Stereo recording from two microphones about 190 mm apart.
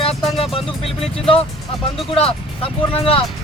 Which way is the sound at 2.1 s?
30° left (ahead or behind).